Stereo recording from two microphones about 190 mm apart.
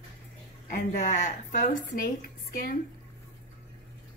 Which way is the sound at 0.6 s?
40° left (ahead or behind).